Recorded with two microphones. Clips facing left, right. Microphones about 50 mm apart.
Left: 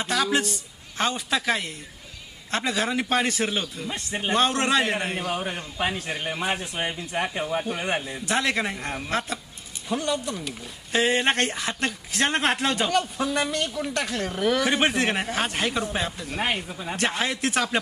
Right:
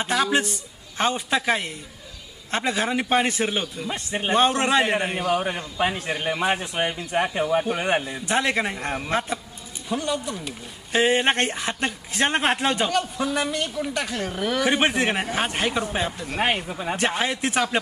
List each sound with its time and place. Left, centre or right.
0.0 s a man's voice: centre
9.9 s a man's voice: centre
16.3 s a man's voice: right